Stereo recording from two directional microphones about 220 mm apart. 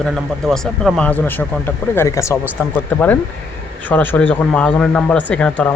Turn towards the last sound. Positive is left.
turn(degrees=5)  # may be behind; listen again after turning